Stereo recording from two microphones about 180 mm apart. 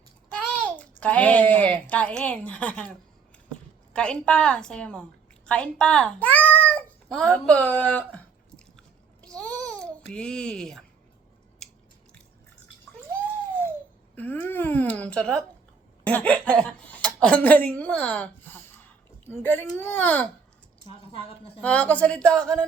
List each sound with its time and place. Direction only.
0.5 s a child's voice: 5° left (ahead or behind)
3.9 s a woman's voice: 5° left (ahead or behind)
6.5 s cat: 10° left (ahead or behind)
9.2 s babbling: 5° left (ahead or behind)
14.2 s a woman's voice: 10° left (ahead or behind)
21.1 s a woman's voice: 30° left (ahead or behind)
21.6 s a woman's voice: 10° left (ahead or behind)